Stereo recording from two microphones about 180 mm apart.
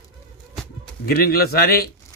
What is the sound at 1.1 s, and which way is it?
Speech, 60° left (ahead or behind).